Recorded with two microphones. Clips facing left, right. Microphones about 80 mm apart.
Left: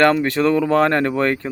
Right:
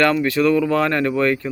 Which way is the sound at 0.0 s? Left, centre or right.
Left.